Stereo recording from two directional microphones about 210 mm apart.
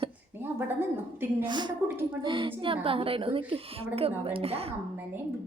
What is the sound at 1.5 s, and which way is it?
Speech, 20° right (ahead or behind).